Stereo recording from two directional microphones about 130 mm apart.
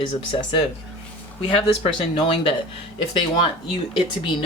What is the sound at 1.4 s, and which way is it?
Speech, 40° left (ahead or behind).